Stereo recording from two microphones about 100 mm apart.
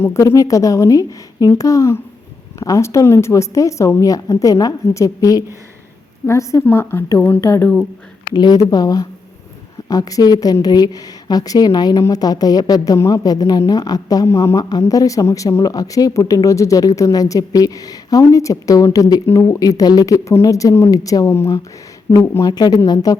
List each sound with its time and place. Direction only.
0.0 s a woman's voice: 30° left (ahead or behind)
8.3 s speech: 45° left (ahead or behind)
19.2 s a woman's voice: 25° left (ahead or behind)
19.5 s a woman's voice: 35° left (ahead or behind)
22.5 s speech: 45° left (ahead or behind)